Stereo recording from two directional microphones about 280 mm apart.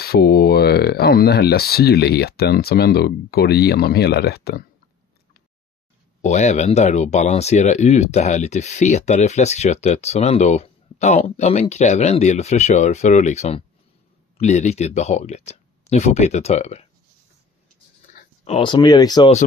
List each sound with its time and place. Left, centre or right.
0.0 s speech: left
6.2 s speech: left
18.1 s a sound: left
18.4 s speech: centre